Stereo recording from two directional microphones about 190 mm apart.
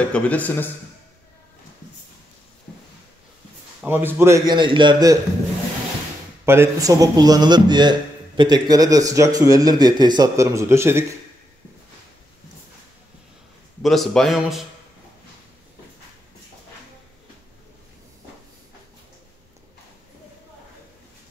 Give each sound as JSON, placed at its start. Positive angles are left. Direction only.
{"t": 0.1, "sound": "a man's voice", "side_deg": 10}
{"t": 2.7, "sound": "a sound", "side_deg": 5}
{"t": 3.8, "sound": "a man's voice", "side_deg": -10}
{"t": 6.4, "sound": "a man's voice", "side_deg": -15}
{"t": 13.8, "sound": "speech", "side_deg": 0}